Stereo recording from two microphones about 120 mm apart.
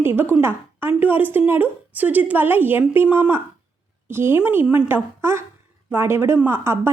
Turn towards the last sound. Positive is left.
turn(degrees=-20)  # may be behind; listen again after turning